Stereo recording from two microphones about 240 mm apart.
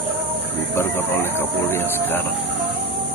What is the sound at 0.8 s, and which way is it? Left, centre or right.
Speech, centre.